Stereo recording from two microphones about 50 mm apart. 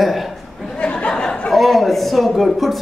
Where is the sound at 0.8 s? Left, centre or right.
Left.